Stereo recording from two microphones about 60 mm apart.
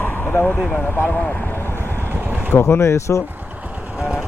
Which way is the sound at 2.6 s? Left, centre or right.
Left.